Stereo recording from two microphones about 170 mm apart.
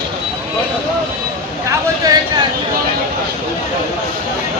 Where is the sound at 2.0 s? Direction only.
20° right (ahead or behind).